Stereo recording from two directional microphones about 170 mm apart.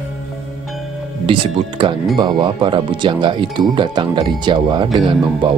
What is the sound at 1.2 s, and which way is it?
Speech, 30° right (ahead or behind).